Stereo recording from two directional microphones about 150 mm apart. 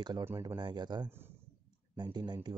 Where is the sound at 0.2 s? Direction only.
15° right (ahead or behind).